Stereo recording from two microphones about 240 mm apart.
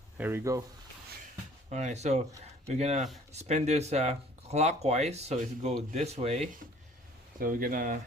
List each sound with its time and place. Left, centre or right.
0.2 s speech: centre
1.7 s speech: right